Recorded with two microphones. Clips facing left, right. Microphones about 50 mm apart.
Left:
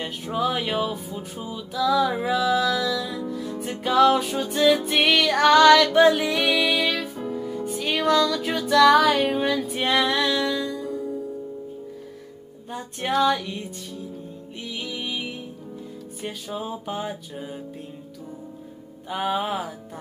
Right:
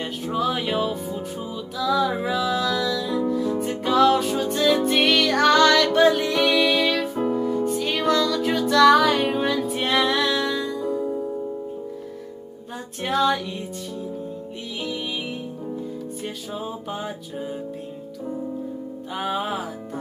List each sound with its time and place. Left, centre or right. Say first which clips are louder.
0.0 s music: right 1 dB; centre
11.0 s music: right 4 dB; centre
12.7 s music: even; centre
16.2 s music: right 1 dB; centre
19.1 s music: left 1 dB; centre